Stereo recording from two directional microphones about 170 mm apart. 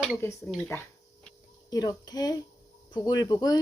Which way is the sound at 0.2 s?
15° left (ahead or behind).